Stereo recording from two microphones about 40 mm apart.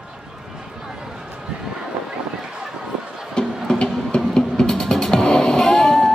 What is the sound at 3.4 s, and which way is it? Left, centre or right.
Music, left.